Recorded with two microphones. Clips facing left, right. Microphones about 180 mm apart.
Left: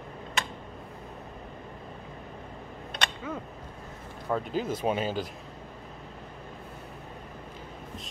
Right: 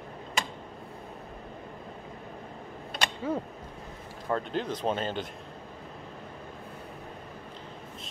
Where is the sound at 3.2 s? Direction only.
35° right (ahead or behind).